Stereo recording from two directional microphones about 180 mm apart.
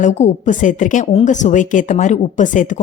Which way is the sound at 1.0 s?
30° left (ahead or behind).